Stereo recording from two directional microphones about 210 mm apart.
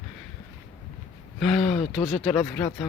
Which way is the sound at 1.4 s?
Centre (ahead or behind).